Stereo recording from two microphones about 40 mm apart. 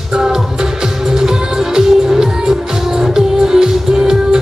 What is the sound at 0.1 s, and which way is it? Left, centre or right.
Music, centre.